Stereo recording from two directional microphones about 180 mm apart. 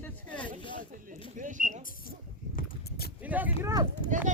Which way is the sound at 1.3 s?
45° right (ahead or behind).